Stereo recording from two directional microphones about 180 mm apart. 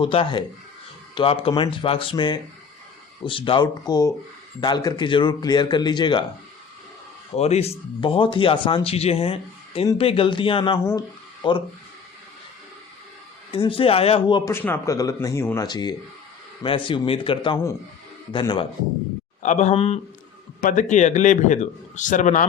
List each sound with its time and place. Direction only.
0.0 s speech: 30° left (ahead or behind)
7.3 s a man's voice: 35° left (ahead or behind)
13.5 s speech: 30° left (ahead or behind)
14.5 s speech: 10° left (ahead or behind)
19.4 s a man's voice: 40° left (ahead or behind)
20.6 s a man's voice: 45° left (ahead or behind)